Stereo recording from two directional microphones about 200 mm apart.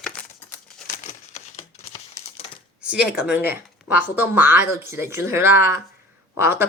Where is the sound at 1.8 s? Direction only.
15° left (ahead or behind).